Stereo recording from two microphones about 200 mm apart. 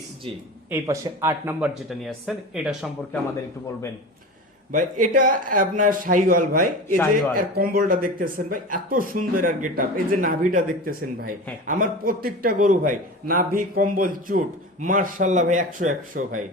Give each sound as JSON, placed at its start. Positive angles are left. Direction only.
{"t": 0.7, "sound": "speech", "side_deg": -10}
{"t": 1.9, "sound": "speech", "side_deg": 0}
{"t": 4.7, "sound": "a man's voice", "side_deg": -40}
{"t": 6.8, "sound": "speech", "side_deg": 5}
{"t": 7.5, "sound": "a man's voice", "side_deg": -50}